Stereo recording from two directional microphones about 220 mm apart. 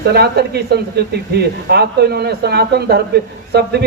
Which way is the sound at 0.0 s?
50° right (ahead or behind).